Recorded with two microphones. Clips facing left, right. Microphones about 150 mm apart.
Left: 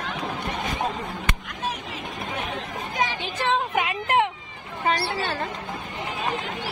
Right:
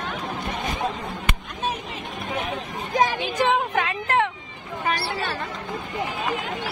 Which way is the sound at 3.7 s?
15° left (ahead or behind).